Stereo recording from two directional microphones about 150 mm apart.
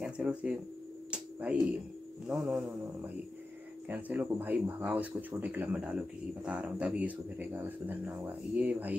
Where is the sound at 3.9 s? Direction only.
10° right (ahead or behind).